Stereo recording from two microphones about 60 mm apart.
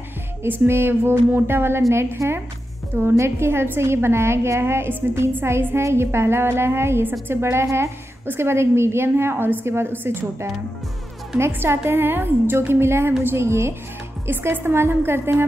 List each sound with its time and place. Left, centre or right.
0.4 s a woman's voice: right
1.8 s a woman's voice: right